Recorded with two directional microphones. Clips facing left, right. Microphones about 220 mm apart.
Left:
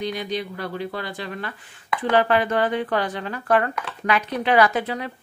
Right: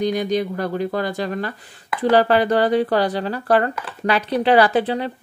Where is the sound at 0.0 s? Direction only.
45° right (ahead or behind).